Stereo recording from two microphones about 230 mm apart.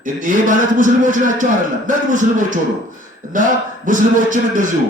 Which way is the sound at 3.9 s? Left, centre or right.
Right.